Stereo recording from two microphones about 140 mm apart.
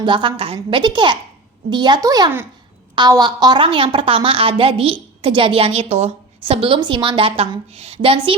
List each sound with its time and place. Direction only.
0.0 s a woman's voice: 35° right (ahead or behind)